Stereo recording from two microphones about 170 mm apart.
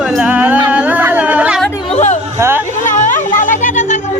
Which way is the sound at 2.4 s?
15° right (ahead or behind).